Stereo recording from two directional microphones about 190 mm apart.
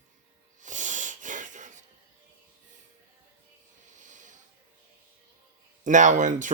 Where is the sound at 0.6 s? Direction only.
40° right (ahead or behind).